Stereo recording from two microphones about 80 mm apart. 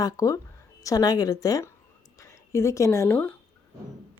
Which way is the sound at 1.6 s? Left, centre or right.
Left.